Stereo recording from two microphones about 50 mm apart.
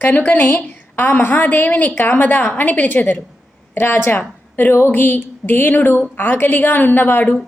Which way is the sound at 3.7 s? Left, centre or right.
Left.